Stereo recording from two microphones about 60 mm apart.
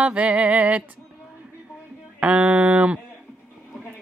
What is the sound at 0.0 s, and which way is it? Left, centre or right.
Speech, right.